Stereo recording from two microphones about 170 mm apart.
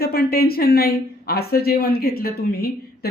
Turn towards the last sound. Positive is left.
turn(degrees=65)  # may be behind; listen again after turning